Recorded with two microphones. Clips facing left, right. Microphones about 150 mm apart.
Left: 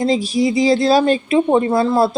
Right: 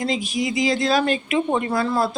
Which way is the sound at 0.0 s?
30° left (ahead or behind).